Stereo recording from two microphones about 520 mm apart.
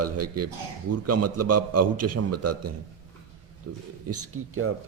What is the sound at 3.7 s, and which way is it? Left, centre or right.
A man's voice, right.